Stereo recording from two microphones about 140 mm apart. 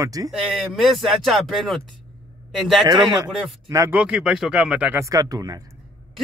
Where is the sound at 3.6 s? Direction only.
20° right (ahead or behind).